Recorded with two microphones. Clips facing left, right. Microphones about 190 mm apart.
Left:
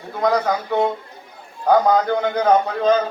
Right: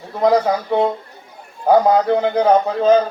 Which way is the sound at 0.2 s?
30° right (ahead or behind).